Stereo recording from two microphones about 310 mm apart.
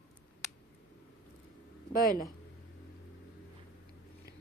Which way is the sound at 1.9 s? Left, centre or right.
Left.